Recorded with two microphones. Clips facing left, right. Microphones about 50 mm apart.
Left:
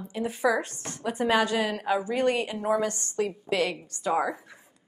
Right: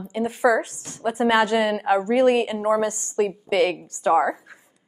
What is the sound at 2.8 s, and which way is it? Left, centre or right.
A woman's voice, centre.